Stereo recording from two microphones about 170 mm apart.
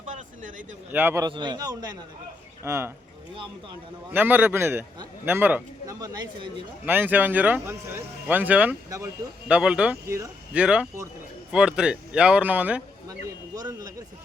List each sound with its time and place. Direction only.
0.0 s a sound: 45° right (ahead or behind)
0.9 s speech: 10° right (ahead or behind)
1.3 s a man's voice: 25° right (ahead or behind)
4.1 s speech: 10° right (ahead or behind)
6.0 s a man's voice: 25° right (ahead or behind)
6.8 s speech: 10° right (ahead or behind)
13.6 s a man's voice: 20° right (ahead or behind)